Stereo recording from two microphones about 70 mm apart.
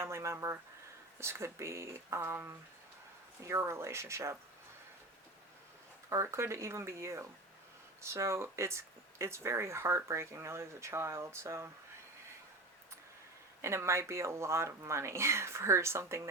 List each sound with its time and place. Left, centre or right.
0.0 s speech: right
3.4 s speech: right
6.1 s speech: right
13.6 s speech: right